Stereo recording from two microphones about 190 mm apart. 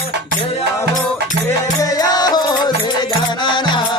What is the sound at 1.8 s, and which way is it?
Music, 20° left (ahead or behind).